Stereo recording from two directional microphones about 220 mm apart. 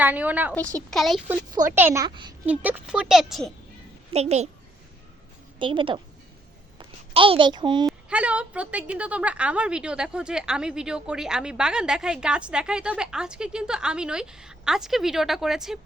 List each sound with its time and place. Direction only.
0.0 s a woman's voice: 5° right (ahead or behind)
0.5 s a woman's voice: 5° left (ahead or behind)
1.7 s a woman's voice: 10° right (ahead or behind)
2.5 s a woman's voice: 5° right (ahead or behind)
4.1 s a woman's voice: 30° right (ahead or behind)
5.5 s a woman's voice: 20° right (ahead or behind)
7.9 s a woman's voice: 5° right (ahead or behind)